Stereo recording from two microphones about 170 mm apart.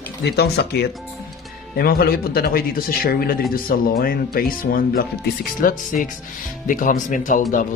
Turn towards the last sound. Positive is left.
turn(degrees=50)  # may be behind; listen again after turning